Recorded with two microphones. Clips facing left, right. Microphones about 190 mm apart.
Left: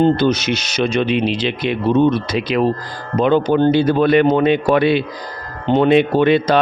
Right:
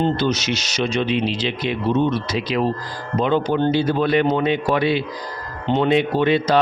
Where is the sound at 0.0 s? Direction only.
55° left (ahead or behind).